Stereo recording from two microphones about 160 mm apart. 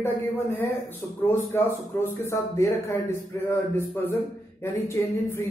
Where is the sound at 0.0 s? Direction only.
15° left (ahead or behind).